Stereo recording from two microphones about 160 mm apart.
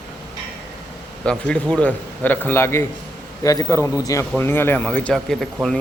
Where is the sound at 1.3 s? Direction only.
5° left (ahead or behind).